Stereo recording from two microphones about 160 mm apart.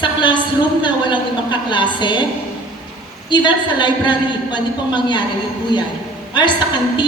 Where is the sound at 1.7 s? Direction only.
30° left (ahead or behind).